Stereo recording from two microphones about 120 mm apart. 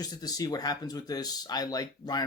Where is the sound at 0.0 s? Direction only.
30° left (ahead or behind).